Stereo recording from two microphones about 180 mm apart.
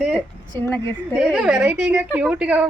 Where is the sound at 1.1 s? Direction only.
5° right (ahead or behind).